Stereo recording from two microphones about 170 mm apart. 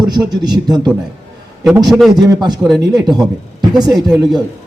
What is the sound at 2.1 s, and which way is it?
Speech, 25° right (ahead or behind).